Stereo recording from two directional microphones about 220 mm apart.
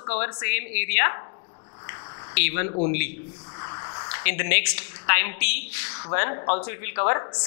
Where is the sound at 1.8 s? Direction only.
20° left (ahead or behind).